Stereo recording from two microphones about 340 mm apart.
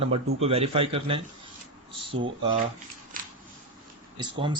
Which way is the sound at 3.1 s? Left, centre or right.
Right.